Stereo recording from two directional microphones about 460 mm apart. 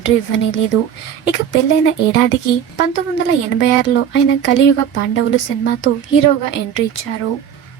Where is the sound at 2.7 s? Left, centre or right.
Left.